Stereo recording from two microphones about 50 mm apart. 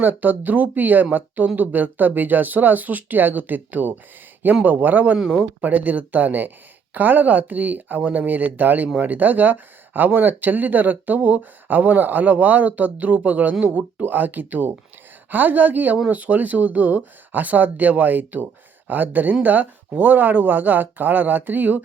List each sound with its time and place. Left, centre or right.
0.0 s speech: right